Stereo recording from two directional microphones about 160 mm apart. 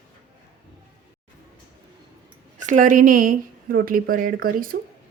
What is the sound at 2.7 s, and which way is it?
Speech, 55° right (ahead or behind).